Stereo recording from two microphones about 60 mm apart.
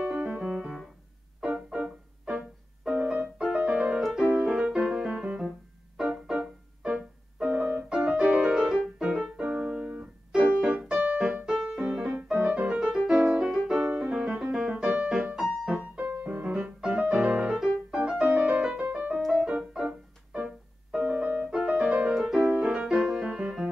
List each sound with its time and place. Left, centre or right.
0.0 s keyboard: right
0.6 s keyboard: centre
1.5 s music: centre
4.0 s music: centre
8.5 s piano: centre
10.6 s music: centre
16.0 s music: right
19.2 s music: centre
21.0 s music: right